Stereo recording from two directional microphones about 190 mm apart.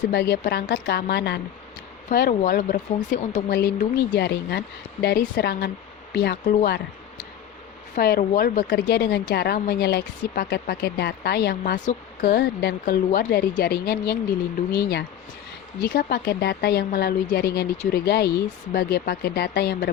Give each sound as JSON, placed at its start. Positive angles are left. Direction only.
{"t": 0.1, "sound": "speech", "side_deg": 55}
{"t": 2.0, "sound": "speech", "side_deg": 45}
{"t": 3.9, "sound": "speech", "side_deg": 60}
{"t": 7.9, "sound": "speech", "side_deg": 55}
{"t": 13.1, "sound": "speech", "side_deg": 45}